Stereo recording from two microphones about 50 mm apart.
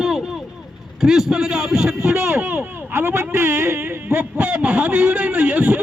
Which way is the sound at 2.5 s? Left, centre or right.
Right.